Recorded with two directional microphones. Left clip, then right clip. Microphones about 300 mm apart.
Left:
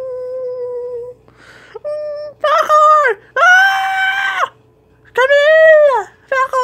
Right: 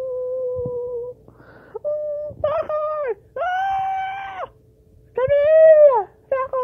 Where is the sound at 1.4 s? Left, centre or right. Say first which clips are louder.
Left 2 dB; centre.